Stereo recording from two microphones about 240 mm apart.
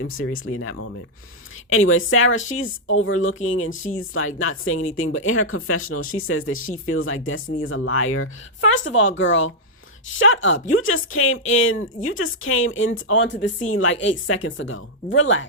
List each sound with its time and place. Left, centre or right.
0.0 s speech: left